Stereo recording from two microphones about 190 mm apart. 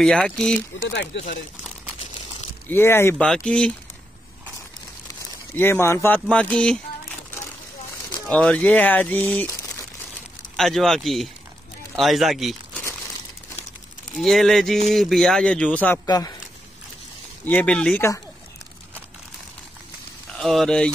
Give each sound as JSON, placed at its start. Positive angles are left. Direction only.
{"t": 0.0, "sound": "speech", "side_deg": 5}
{"t": 0.8, "sound": "speech", "side_deg": 70}
{"t": 2.7, "sound": "speech", "side_deg": 10}
{"t": 5.5, "sound": "speech", "side_deg": 10}
{"t": 8.3, "sound": "speech", "side_deg": 5}
{"t": 14.1, "sound": "speech", "side_deg": 0}
{"t": 16.1, "sound": "speech", "side_deg": 20}
{"t": 17.5, "sound": "speech", "side_deg": 5}
{"t": 20.3, "sound": "speech", "side_deg": 0}